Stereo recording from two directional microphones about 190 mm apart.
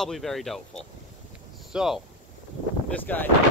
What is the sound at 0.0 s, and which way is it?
Speech, centre (ahead or behind).